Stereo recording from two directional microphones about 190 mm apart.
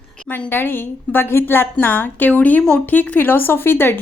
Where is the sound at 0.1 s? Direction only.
5° left (ahead or behind).